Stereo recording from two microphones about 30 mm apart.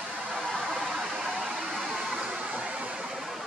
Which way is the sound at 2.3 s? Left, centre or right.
Right.